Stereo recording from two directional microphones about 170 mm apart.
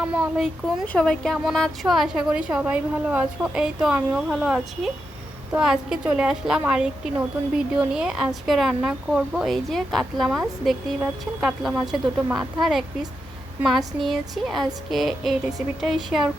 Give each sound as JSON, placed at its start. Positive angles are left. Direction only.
{"t": 0.0, "sound": "a woman's voice", "side_deg": -5}